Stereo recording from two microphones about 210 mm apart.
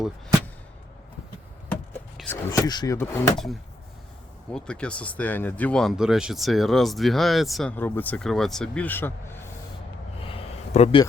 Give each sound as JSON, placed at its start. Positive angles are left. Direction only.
{"t": 1.7, "sound": "a sound", "side_deg": 5}
{"t": 2.5, "sound": "speech", "side_deg": 20}
{"t": 3.3, "sound": "speech", "side_deg": 0}
{"t": 10.8, "sound": "speech", "side_deg": 20}